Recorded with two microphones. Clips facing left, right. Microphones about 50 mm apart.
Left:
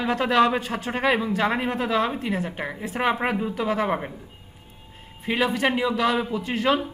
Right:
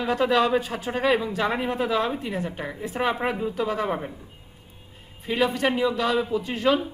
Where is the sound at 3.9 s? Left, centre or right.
Left.